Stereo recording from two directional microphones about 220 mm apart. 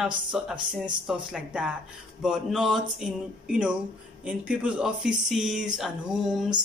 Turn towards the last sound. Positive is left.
turn(degrees=0)  # may be behind; listen again after turning